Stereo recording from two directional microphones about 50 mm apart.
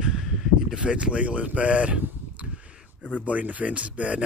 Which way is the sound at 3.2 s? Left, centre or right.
Right.